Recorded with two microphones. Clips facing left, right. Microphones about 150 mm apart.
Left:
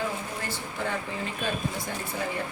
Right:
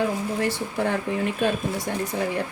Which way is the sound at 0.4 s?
70° right (ahead or behind).